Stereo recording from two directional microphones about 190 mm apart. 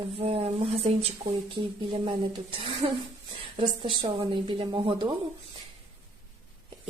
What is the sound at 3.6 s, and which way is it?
Speech, 25° right (ahead or behind).